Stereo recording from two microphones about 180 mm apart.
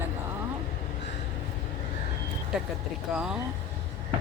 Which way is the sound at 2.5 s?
5° right (ahead or behind).